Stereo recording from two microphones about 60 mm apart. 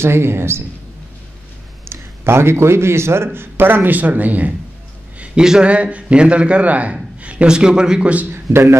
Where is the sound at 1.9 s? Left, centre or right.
Right.